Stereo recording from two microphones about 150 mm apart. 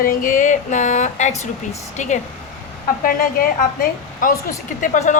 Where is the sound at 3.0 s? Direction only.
75° left (ahead or behind).